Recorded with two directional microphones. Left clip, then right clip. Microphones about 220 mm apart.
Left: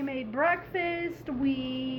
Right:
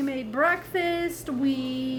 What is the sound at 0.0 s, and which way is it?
A woman's voice, 30° right (ahead or behind).